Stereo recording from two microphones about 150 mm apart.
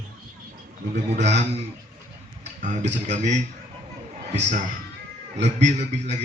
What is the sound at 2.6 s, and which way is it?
Speech, 50° right (ahead or behind).